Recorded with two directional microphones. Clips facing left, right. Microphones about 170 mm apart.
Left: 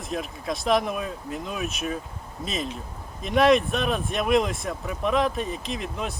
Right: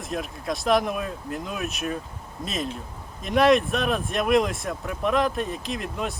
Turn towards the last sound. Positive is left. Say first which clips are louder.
# right 1 dB
turn(degrees=0)  # may be behind; listen again after turning